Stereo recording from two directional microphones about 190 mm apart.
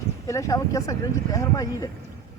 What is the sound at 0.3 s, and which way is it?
Speech, 15° left (ahead or behind).